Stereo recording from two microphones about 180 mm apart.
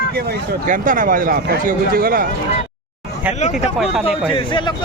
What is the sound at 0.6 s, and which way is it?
Speech, 50° right (ahead or behind).